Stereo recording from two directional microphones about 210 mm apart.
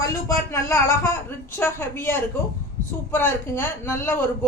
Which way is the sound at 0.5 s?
15° left (ahead or behind).